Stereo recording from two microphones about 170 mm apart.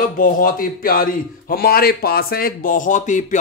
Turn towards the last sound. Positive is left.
turn(degrees=45)  # may be behind; listen again after turning